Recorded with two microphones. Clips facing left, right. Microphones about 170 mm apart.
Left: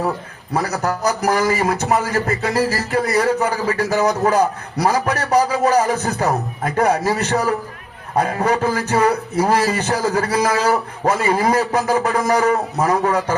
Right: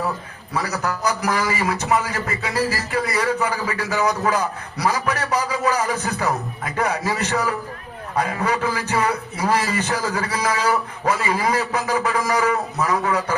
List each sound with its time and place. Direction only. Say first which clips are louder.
0.5 s a man's voice: left 4 dB; 45° left (ahead or behind)